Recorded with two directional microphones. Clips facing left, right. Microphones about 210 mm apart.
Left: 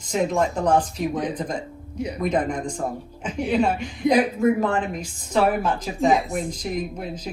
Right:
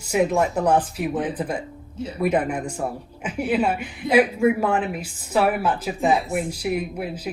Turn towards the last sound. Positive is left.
turn(degrees=-10)  # may be behind; listen again after turning